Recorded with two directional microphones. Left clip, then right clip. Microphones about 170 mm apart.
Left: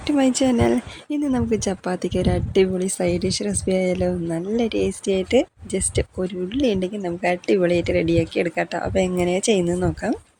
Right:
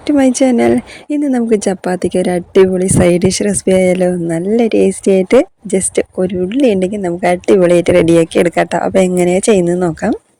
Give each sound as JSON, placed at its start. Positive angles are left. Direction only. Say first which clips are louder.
{"t": 0.1, "sound": "speech", "louder": "right 8 dB", "side_deg": -40}